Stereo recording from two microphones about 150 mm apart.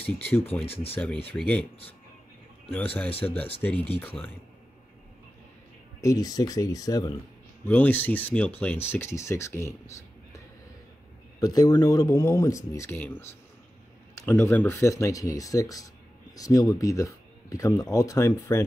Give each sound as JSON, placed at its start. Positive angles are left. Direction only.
{"t": 0.0, "sound": "speech", "side_deg": 15}
{"t": 2.7, "sound": "speech", "side_deg": 10}
{"t": 3.1, "sound": "speech", "side_deg": 40}
{"t": 3.6, "sound": "speech", "side_deg": 10}
{"t": 5.9, "sound": "speech", "side_deg": 25}
{"t": 7.6, "sound": "speech", "side_deg": 10}
{"t": 11.3, "sound": "speech", "side_deg": 25}